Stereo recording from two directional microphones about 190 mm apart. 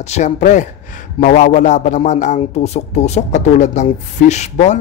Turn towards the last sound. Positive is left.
turn(degrees=35)  # may be behind; listen again after turning